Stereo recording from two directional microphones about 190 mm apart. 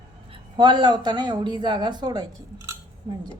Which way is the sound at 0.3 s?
25° right (ahead or behind).